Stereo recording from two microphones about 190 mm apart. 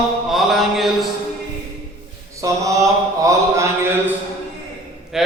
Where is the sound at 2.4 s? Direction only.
15° right (ahead or behind).